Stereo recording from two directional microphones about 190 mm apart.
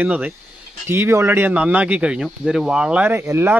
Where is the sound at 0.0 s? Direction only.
5° right (ahead or behind).